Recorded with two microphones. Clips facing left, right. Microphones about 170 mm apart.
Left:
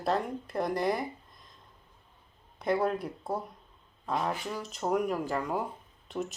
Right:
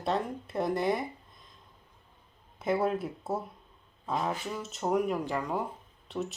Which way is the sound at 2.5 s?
5° right (ahead or behind).